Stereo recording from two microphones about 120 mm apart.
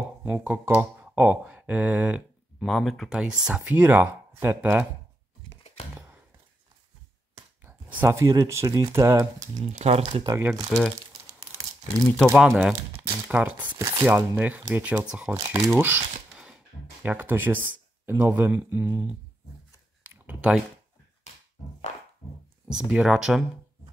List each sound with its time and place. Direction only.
0.3 s speech: 10° right (ahead or behind)
2.6 s speech: centre (ahead or behind); by 4.8 s 15° right (ahead or behind)
7.6 s speech: 15° right (ahead or behind)
9.6 s speech: 70° right (ahead or behind)
10.5 s speech: centre (ahead or behind)
12.4 s speech: 5° right (ahead or behind)
12.9 s speech: 15° right (ahead or behind)
13.7 s speech: 25° right (ahead or behind)
14.0 s speech: 15° right (ahead or behind)
15.5 s speech: 20° right (ahead or behind)
20.1 s a sound: 10° right (ahead or behind)
22.7 s speech: 5° right (ahead or behind)